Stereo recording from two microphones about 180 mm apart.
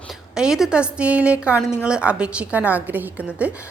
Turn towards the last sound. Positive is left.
turn(degrees=-10)  # may be behind; listen again after turning